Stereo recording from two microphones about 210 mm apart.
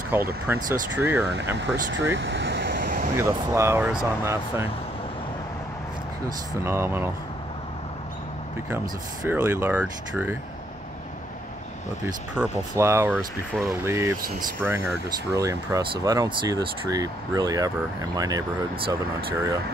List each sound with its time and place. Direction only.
0.1 s speech: 10° right (ahead or behind)
1.3 s speech: 55° right (ahead or behind)
2.7 s a sound: 45° right (ahead or behind)
3.2 s speech: 10° right (ahead or behind)
6.2 s speech: 10° right (ahead or behind)
8.6 s speech: 10° right (ahead or behind)
12.4 s speech: 10° right (ahead or behind)